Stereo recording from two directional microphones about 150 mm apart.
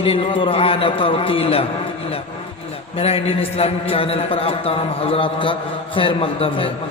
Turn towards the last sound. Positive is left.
turn(degrees=35)  # may be behind; listen again after turning